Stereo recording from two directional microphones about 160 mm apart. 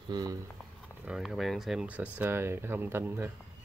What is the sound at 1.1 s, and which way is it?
Speech, centre (ahead or behind).